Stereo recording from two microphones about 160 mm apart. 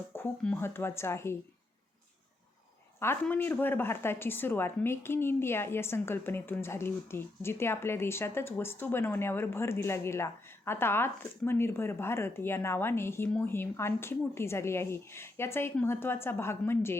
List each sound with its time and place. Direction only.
0.1 s speech: 15° left (ahead or behind)
3.0 s speech: 15° left (ahead or behind)